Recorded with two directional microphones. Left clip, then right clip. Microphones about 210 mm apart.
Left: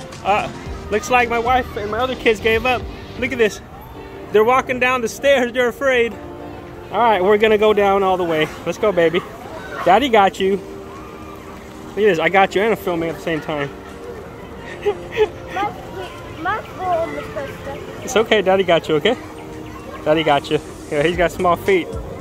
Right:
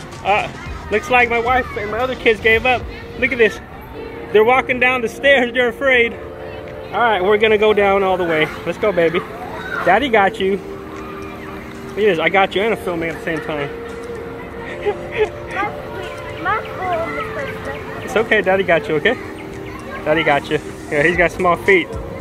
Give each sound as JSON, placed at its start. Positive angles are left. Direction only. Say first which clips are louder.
{"t": 0.2, "sound": "speech", "louder": "right 1 dB", "side_deg": 15}
{"t": 1.6, "sound": "speech", "louder": "right 1 dB", "side_deg": 0}
{"t": 2.2, "sound": "speech", "louder": "right 3 dB", "side_deg": 15}
{"t": 6.9, "sound": "speech", "louder": "even", "side_deg": 30}
{"t": 12.0, "sound": "speech", "louder": "even", "side_deg": 20}
{"t": 14.9, "sound": "a sound", "louder": "left 1 dB", "side_deg": 15}
{"t": 16.5, "sound": "a sound", "louder": "right 2 dB", "side_deg": 35}
{"t": 18.0, "sound": "speech", "louder": "even", "side_deg": 25}